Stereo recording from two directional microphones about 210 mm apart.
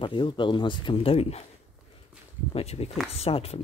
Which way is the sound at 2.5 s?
30° left (ahead or behind).